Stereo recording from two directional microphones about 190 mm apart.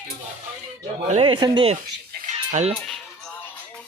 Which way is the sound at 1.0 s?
30° right (ahead or behind).